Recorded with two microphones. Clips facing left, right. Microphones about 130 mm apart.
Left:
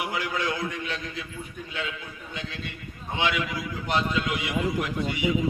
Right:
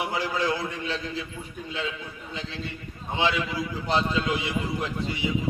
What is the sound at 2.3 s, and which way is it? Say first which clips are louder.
A man's voice: right 1 dB; 30° right (ahead or behind).